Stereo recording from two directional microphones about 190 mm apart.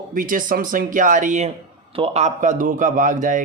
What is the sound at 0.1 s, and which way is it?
Speech, 45° right (ahead or behind).